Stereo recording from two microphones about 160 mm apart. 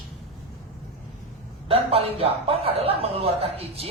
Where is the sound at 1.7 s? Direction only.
40° right (ahead or behind).